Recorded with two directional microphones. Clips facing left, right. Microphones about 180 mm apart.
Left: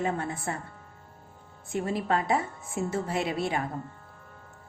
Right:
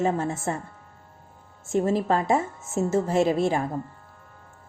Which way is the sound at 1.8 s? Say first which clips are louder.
Right 5 dB; 30° right (ahead or behind).